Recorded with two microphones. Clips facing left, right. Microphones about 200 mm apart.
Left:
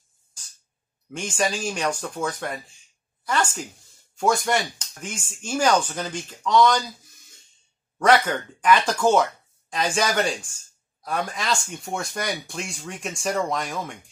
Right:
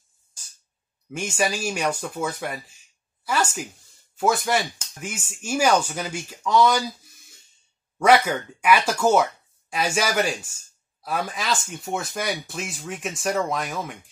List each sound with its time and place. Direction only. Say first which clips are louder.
1.1 s speech: even; 10° right (ahead or behind)
8.0 s speech: right 1 dB; 10° right (ahead or behind)